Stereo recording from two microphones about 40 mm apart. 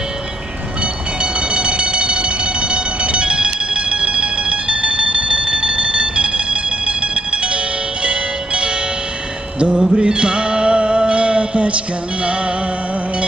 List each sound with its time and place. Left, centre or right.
1.2 s train: right
9.6 s a sound: right
9.8 s music: right